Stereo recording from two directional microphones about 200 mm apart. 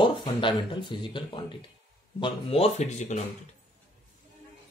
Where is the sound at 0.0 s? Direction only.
25° left (ahead or behind).